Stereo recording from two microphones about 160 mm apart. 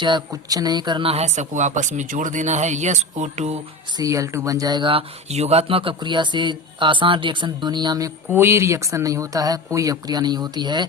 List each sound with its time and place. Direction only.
0.0 s speech: 25° right (ahead or behind); by 3.6 s 45° right (ahead or behind)
3.9 s speech: 20° right (ahead or behind)